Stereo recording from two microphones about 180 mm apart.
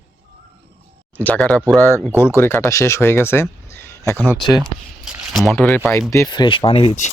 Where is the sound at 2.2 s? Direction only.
15° left (ahead or behind).